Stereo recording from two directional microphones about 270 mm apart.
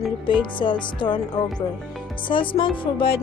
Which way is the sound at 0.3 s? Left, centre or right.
Centre.